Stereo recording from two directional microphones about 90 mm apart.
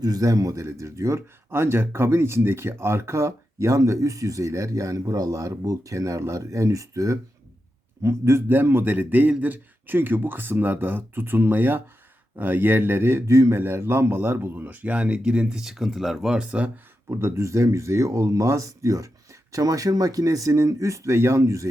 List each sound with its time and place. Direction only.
0.0 s a man's voice: 40° right (ahead or behind); by 16.7 s 15° right (ahead or behind)
17.1 s speech: 30° right (ahead or behind)